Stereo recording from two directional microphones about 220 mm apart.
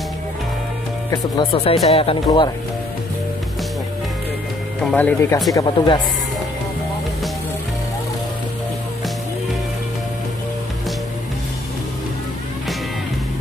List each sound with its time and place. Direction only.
1.1 s speech: 25° left (ahead or behind)
4.9 s speech: 10° left (ahead or behind)